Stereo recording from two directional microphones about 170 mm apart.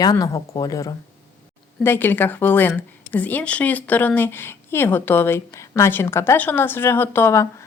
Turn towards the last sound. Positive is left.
turn(degrees=15)  # may be behind; listen again after turning